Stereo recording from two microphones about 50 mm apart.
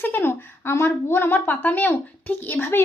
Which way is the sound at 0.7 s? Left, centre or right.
Left.